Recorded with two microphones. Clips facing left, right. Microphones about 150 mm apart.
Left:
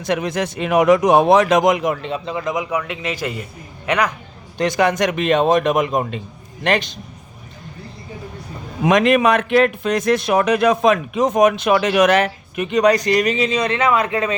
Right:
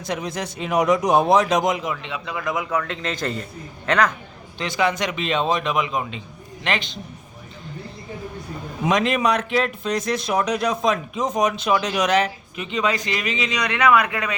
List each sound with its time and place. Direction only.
0.1 s speech: 65° left (ahead or behind); by 2.2 s 40° left (ahead or behind)
2.2 s a man's voice: 25° left (ahead or behind)
4.5 s a man's voice: 45° left (ahead or behind)
8.8 s speech: 60° left (ahead or behind); by 14.3 s 30° left (ahead or behind)